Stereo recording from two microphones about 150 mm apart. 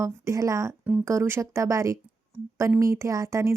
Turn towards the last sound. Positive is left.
turn(degrees=-20)  # may be behind; listen again after turning